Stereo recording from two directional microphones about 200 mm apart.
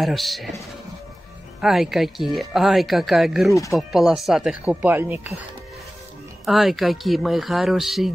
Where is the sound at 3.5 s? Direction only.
15° left (ahead or behind).